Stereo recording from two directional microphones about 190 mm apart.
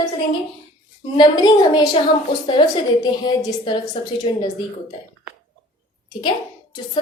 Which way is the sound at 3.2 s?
20° left (ahead or behind).